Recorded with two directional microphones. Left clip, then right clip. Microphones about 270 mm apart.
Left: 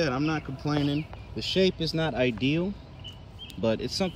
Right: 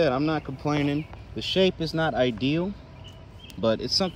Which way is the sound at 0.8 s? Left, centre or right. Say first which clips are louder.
Right 2 dB; centre.